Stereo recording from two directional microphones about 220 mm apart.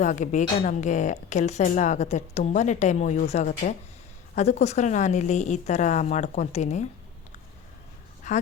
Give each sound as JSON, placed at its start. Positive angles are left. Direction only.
{"t": 0.0, "sound": "speech", "side_deg": 35}
{"t": 8.3, "sound": "a woman's voice", "side_deg": 35}